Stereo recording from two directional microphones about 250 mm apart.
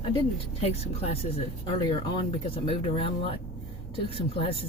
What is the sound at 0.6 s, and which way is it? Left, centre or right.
Speech, left.